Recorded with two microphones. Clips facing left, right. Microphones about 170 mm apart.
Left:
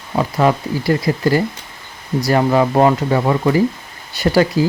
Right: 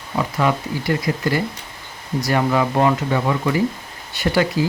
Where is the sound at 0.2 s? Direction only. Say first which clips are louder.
Left 4 dB; 35° left (ahead or behind).